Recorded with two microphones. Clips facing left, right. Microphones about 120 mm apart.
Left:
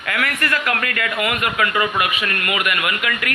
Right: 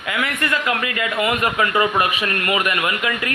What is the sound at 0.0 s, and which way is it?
Speech, 20° right (ahead or behind).